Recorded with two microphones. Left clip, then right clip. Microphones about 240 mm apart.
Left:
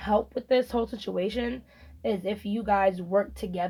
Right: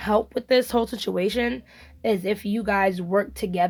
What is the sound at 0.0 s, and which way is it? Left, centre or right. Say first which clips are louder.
Speech: right 3 dB; right.